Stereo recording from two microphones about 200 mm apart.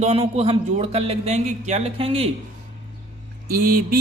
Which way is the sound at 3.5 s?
45° right (ahead or behind).